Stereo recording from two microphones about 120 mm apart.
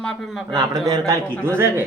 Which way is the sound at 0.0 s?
5° left (ahead or behind).